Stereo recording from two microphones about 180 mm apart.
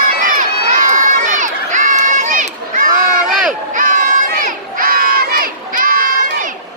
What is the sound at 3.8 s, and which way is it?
Crowd, 50° right (ahead or behind).